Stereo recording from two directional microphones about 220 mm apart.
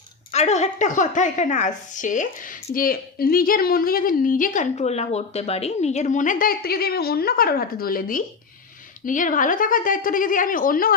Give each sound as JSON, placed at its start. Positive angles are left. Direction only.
{"t": 0.3, "sound": "a woman's voice", "side_deg": 30}